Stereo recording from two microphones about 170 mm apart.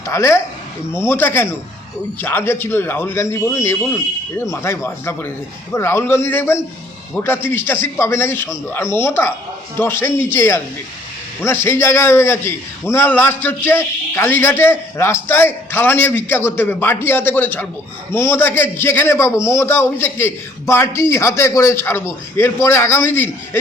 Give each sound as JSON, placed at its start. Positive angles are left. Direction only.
{"t": 0.0, "sound": "a man's voice", "side_deg": 15}